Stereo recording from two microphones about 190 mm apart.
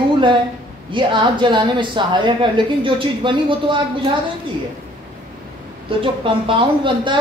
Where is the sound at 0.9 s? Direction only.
25° right (ahead or behind).